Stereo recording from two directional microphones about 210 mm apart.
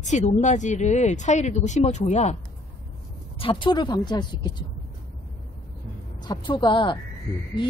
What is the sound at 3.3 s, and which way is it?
Speech, 25° left (ahead or behind).